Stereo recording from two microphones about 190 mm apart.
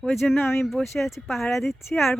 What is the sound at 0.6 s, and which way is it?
Speech, centre (ahead or behind).